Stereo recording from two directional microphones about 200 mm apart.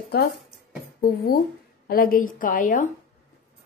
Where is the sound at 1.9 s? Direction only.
45° left (ahead or behind).